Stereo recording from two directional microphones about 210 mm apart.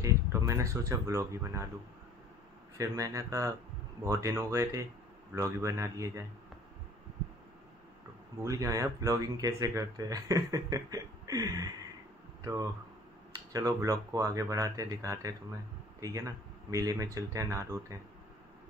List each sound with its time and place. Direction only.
0.0 s speech: 15° right (ahead or behind)
2.8 s speech: 15° right (ahead or behind)
8.4 s speech: 15° right (ahead or behind)
13.5 s speech: 15° right (ahead or behind)